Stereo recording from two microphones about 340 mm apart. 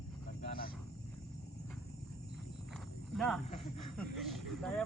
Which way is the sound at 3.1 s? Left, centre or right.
Centre.